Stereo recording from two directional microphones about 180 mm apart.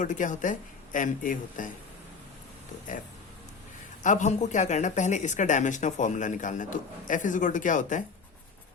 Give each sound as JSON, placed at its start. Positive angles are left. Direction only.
{"t": 0.0, "sound": "speech", "side_deg": 45}
{"t": 4.0, "sound": "speech", "side_deg": 45}